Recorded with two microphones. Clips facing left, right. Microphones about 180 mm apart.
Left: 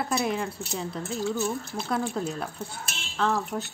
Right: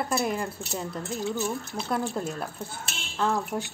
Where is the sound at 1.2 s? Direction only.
15° right (ahead or behind).